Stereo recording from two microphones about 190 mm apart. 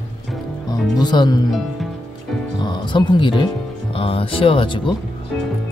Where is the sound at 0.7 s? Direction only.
20° left (ahead or behind).